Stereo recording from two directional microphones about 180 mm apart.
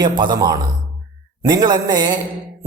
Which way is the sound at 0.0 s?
25° right (ahead or behind).